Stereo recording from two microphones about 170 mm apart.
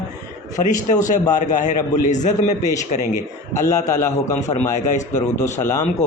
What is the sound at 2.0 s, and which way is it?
Speech, 45° left (ahead or behind).